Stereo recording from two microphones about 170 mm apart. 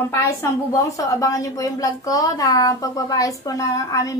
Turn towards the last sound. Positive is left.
turn(degrees=20)  # may be behind; listen again after turning